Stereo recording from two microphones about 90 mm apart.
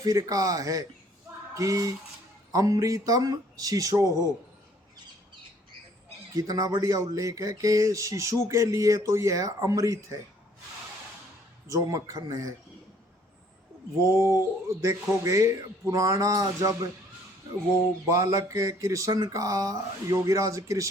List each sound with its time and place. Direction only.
0.0 s speech: 40° right (ahead or behind)
6.3 s speech: 40° right (ahead or behind)
11.7 s speech: 40° right (ahead or behind)
14.0 s speech: 30° right (ahead or behind)
18.1 s speech: 35° right (ahead or behind)